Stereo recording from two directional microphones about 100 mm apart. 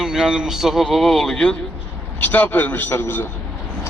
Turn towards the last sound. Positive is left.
turn(degrees=20)  # may be behind; listen again after turning